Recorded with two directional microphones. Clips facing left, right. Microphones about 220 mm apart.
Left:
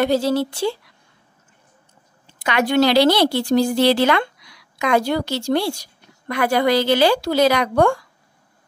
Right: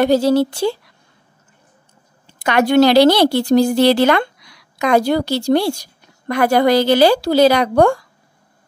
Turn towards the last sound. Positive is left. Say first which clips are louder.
# right 4 dB
turn(degrees=-40)  # may be behind; listen again after turning